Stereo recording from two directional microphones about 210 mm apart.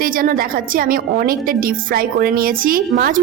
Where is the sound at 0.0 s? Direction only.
40° right (ahead or behind).